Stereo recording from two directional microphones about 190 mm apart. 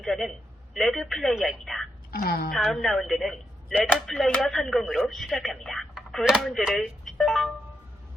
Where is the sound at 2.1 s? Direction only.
50° left (ahead or behind).